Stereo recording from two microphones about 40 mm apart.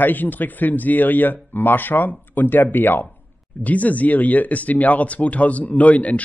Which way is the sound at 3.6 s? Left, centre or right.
Left.